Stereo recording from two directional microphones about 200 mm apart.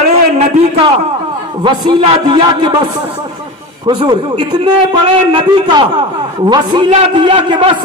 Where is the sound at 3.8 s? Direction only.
20° right (ahead or behind).